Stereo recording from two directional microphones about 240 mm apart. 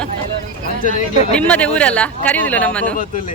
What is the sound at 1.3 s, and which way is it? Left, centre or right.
Speech, centre.